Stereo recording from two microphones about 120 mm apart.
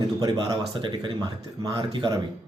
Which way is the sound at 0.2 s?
30° right (ahead or behind).